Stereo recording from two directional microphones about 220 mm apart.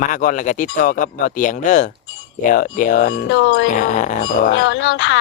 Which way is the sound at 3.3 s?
55° left (ahead or behind).